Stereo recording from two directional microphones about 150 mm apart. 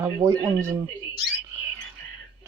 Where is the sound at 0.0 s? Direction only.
20° right (ahead or behind).